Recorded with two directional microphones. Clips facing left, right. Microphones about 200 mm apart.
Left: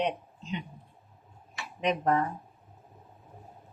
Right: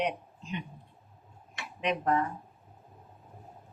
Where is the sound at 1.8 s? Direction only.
40° left (ahead or behind).